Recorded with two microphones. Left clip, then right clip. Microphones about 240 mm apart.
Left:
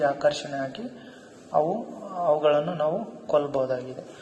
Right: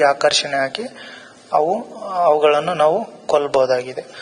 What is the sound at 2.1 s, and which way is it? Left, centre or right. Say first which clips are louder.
A man's voice: right 8 dB; right.